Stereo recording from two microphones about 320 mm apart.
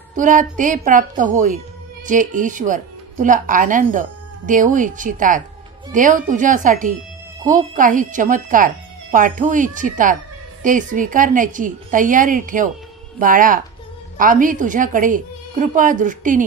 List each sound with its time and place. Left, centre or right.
0.1 s speech: right